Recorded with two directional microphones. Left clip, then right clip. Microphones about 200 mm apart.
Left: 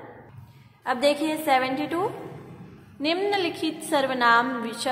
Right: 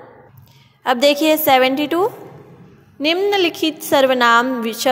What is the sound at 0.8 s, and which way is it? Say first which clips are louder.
A woman's voice: right 9 dB; 40° right (ahead or behind).